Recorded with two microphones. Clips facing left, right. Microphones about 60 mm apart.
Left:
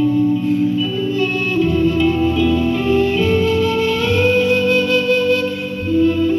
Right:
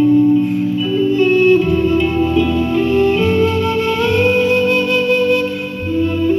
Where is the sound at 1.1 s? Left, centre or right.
Right.